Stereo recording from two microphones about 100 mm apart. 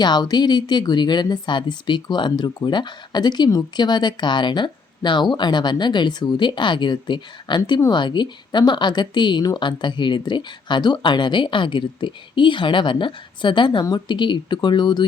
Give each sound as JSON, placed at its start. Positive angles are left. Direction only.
{"t": 0.0, "sound": "speech", "side_deg": 45}